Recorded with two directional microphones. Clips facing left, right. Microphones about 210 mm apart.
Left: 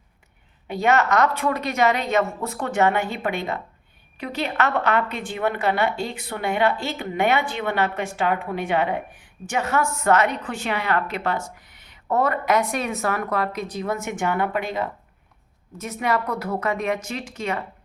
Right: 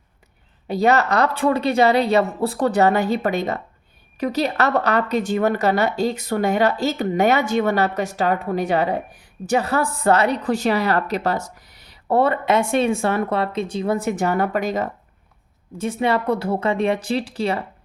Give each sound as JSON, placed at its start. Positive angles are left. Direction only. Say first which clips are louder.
{"t": 0.7, "sound": "a woman's voice", "louder": "right 2 dB", "side_deg": -35}
{"t": 15.8, "sound": "a woman's voice", "louder": "right 4 dB", "side_deg": -30}